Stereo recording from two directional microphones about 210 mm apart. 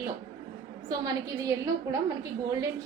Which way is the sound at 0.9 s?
20° right (ahead or behind).